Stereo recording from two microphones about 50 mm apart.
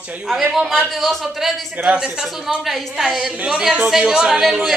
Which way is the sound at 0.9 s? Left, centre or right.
Centre.